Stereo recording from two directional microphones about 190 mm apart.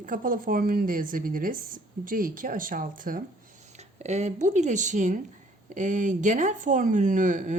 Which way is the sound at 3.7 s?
35° right (ahead or behind).